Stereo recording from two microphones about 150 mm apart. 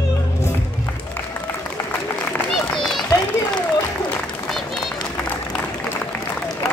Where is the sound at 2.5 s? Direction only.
Centre (ahead or behind).